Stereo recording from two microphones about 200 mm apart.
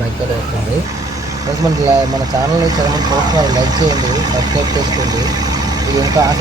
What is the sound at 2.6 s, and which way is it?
Speech, 20° right (ahead or behind).